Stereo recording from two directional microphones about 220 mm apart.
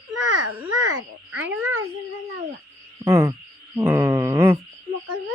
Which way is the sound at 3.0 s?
15° right (ahead or behind).